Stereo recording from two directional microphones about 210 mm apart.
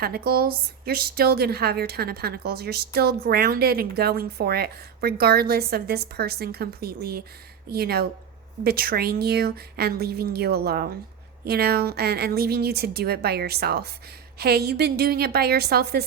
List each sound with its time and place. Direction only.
0.0 s speech: 45° right (ahead or behind)